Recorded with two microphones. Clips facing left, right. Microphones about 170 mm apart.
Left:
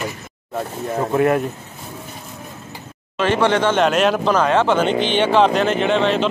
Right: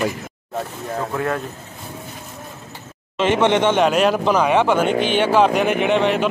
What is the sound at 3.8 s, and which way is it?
Speech, 5° right (ahead or behind).